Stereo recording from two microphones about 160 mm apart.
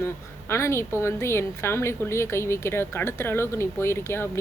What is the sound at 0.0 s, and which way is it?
Speech, 15° left (ahead or behind).